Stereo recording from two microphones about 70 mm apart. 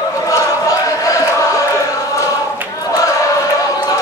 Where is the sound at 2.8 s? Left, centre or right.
Left.